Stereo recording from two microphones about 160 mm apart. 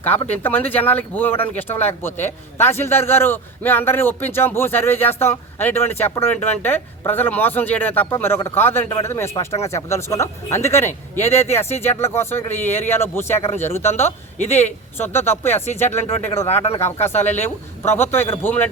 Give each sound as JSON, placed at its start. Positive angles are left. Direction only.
{"t": 0.3, "sound": "a man's voice", "side_deg": 10}
{"t": 13.4, "sound": "speech", "side_deg": 45}
{"t": 13.7, "sound": "a man's voice", "side_deg": 15}